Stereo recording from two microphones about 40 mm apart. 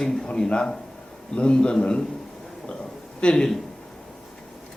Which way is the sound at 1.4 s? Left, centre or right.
Left.